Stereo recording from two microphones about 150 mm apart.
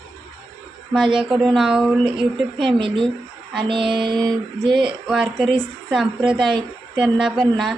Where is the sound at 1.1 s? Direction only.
5° right (ahead or behind).